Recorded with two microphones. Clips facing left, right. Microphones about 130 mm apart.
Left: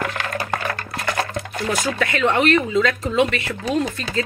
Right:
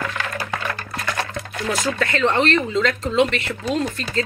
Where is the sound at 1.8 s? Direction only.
10° left (ahead or behind).